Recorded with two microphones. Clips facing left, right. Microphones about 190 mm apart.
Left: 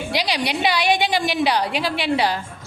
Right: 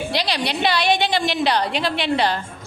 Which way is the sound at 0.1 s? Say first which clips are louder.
Left 3 dB; 10° left (ahead or behind).